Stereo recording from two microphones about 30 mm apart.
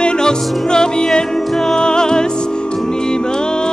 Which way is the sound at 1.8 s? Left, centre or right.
Left.